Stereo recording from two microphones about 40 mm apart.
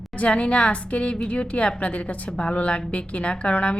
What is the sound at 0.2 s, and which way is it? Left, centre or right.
A woman's voice, left.